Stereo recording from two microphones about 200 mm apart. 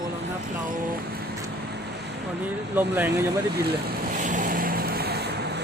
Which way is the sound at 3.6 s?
45° right (ahead or behind).